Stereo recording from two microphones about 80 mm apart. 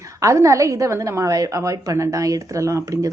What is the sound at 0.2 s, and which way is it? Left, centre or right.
A woman's voice, right.